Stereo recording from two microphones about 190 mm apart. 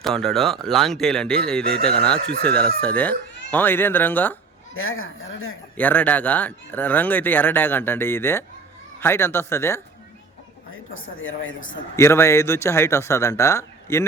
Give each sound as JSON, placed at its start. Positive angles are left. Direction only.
{"t": 0.0, "sound": "speech", "side_deg": 0}
{"t": 4.7, "sound": "speech", "side_deg": 90}
{"t": 5.7, "sound": "speech", "side_deg": 10}
{"t": 10.9, "sound": "speech", "side_deg": 90}
{"t": 11.9, "sound": "speech", "side_deg": 15}